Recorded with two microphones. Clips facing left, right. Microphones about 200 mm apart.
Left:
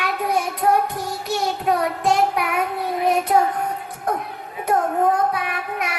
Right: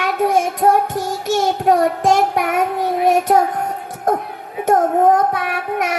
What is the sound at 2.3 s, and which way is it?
A child's voice, 45° right (ahead or behind).